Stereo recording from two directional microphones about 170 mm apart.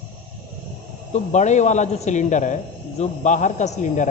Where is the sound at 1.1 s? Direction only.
45° left (ahead or behind).